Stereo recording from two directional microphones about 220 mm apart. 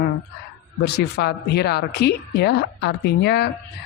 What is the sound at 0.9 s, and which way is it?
A woman's voice, 50° left (ahead or behind).